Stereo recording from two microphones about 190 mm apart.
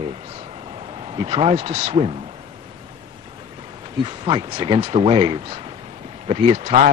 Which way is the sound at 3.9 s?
25° right (ahead or behind).